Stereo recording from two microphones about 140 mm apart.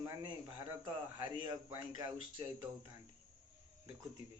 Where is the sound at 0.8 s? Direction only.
30° right (ahead or behind).